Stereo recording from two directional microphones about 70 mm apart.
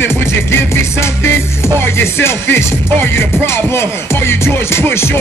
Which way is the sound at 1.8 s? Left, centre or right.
Left.